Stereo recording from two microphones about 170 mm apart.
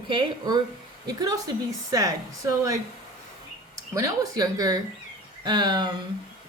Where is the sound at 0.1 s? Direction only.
25° right (ahead or behind).